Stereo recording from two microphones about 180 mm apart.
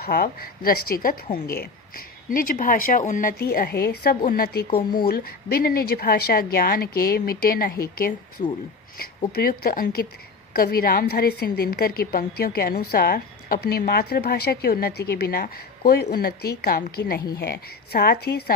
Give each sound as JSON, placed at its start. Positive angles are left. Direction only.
{"t": 0.0, "sound": "a woman's voice", "side_deg": 60}
{"t": 8.4, "sound": "speech", "side_deg": 40}
{"t": 9.3, "sound": "a woman's voice", "side_deg": 55}